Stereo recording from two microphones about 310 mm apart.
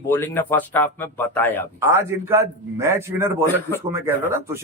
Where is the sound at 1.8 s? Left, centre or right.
Centre.